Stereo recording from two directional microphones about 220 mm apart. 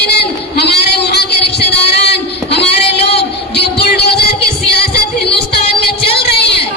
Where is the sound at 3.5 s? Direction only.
50° left (ahead or behind).